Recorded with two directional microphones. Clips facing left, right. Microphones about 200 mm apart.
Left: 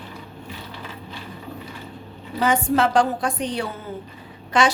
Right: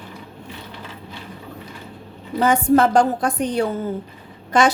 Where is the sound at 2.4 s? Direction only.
45° right (ahead or behind).